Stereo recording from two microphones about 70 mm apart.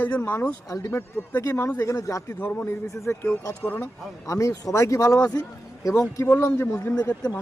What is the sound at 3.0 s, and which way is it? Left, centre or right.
Speech, left.